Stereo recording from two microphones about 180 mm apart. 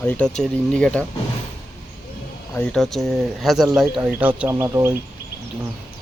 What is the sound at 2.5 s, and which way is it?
Speech, 5° left (ahead or behind).